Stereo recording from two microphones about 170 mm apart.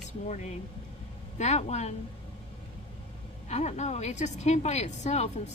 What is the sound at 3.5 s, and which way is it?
A woman's voice, 40° left (ahead or behind).